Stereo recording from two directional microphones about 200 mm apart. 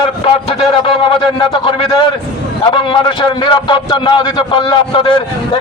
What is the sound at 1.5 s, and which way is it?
A man's voice, 25° left (ahead or behind).